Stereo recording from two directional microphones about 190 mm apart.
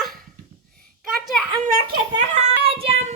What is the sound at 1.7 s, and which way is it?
Giggle, 50° right (ahead or behind).